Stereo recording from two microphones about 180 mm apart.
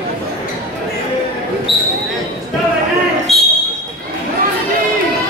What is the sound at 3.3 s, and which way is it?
Basketball bounce, centre (ahead or behind).